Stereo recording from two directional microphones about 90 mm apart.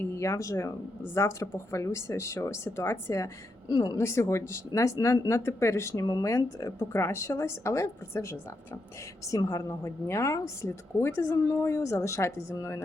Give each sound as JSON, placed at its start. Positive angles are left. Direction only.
{"t": 0.0, "sound": "speech", "side_deg": 35}
{"t": 3.7, "sound": "a woman's voice", "side_deg": 50}
{"t": 3.9, "sound": "speech", "side_deg": 30}